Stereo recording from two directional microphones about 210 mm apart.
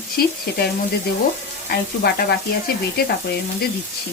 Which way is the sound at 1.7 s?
45° left (ahead or behind).